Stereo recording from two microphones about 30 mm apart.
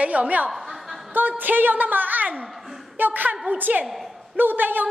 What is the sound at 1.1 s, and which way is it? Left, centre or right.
A woman's voice, right.